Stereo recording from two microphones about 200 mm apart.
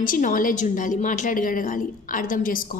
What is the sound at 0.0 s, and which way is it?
A woman's voice, 45° left (ahead or behind).